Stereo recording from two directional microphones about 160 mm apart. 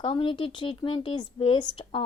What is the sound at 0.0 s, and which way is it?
Speech, 30° left (ahead or behind).